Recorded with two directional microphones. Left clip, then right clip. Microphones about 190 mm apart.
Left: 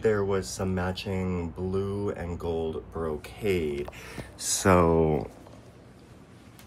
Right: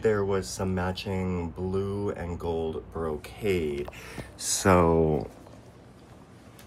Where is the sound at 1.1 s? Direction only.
30° right (ahead or behind).